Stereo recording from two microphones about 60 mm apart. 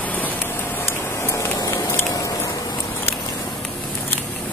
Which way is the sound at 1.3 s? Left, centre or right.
Left.